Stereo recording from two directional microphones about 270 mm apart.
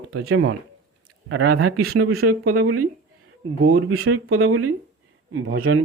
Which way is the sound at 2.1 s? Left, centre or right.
Right.